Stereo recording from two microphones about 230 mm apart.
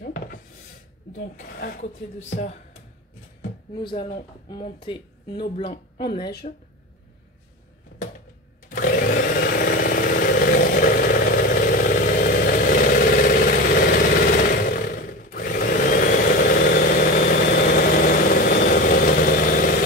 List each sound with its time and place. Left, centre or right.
0.0 s a sound: left
1.4 s speech: left
3.7 s speech: left
8.6 s chainsaw: left